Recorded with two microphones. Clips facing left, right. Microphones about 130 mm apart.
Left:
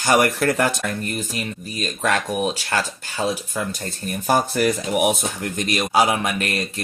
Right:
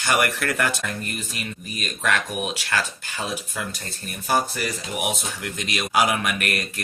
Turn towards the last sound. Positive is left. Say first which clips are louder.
# left 2 dB
turn(degrees=30)  # may be behind; listen again after turning